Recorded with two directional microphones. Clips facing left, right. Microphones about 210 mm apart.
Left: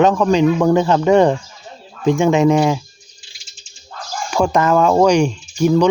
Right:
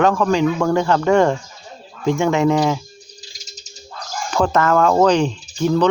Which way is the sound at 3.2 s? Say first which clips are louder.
Right 9 dB; 40° right (ahead or behind).